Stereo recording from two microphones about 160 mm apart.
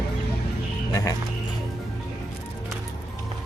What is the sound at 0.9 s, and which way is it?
Speech, 20° left (ahead or behind).